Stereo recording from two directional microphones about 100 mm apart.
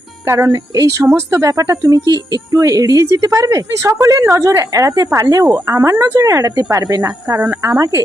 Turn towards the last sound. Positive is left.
turn(degrees=-35)  # may be behind; listen again after turning